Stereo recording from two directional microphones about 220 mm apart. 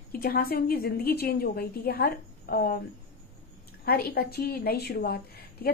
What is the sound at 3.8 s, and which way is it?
A woman's voice, 45° left (ahead or behind).